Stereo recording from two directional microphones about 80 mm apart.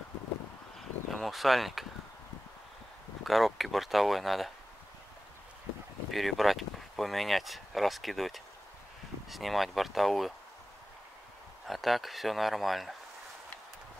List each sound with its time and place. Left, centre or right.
0.7 s a sound: centre
3.3 s speech: centre
6.1 s speech: centre
11.6 s speech: centre